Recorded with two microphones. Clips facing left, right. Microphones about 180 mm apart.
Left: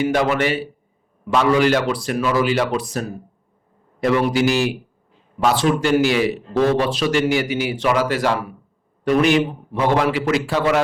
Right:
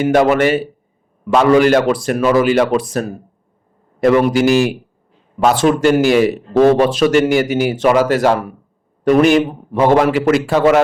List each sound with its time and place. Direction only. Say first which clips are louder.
0.0 s a man's voice: right 6 dB; 50° right (ahead or behind)